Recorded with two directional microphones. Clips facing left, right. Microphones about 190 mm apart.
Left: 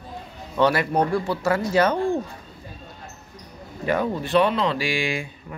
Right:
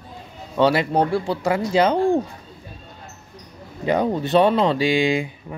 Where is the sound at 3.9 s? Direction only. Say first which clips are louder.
Right 3 dB; 20° right (ahead or behind).